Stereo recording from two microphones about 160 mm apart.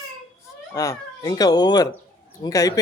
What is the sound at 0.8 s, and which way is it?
Speech, 25° left (ahead or behind).